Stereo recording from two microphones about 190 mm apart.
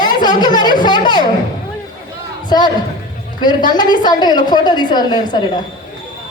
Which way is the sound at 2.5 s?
20° left (ahead or behind).